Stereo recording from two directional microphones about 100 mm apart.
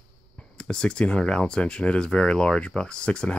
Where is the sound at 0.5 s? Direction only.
10° left (ahead or behind).